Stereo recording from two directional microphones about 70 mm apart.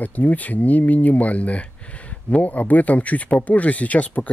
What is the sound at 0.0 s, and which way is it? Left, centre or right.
Speech, left.